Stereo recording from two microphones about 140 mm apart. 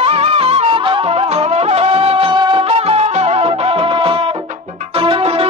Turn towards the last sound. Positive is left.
turn(degrees=-45)  # may be behind; listen again after turning